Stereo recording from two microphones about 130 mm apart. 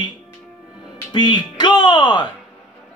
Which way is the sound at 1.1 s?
35° left (ahead or behind).